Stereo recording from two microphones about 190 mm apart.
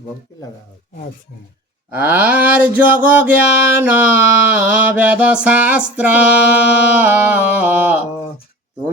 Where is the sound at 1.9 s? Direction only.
10° right (ahead or behind).